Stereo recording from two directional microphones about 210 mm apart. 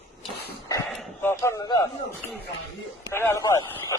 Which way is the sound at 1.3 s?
15° left (ahead or behind).